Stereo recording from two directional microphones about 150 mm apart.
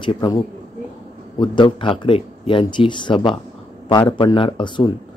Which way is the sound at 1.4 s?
30° left (ahead or behind).